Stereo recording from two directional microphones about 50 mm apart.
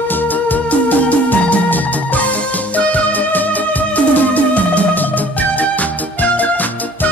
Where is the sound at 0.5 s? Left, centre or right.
Left.